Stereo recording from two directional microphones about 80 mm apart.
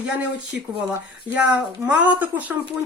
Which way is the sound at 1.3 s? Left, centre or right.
Centre.